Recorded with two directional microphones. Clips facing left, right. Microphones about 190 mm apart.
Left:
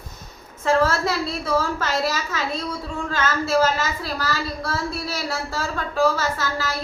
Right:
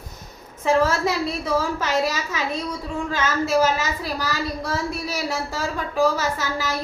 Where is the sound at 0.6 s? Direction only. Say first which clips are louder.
Even; 15° right (ahead or behind).